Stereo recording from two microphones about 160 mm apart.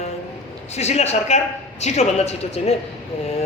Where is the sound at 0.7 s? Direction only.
40° left (ahead or behind).